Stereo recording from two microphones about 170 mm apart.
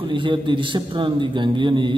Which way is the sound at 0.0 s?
30° right (ahead or behind).